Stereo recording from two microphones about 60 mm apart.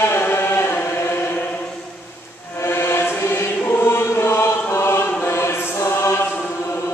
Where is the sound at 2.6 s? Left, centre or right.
Left.